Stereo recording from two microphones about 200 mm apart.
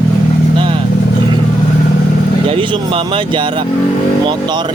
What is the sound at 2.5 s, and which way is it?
Speech, 25° right (ahead or behind).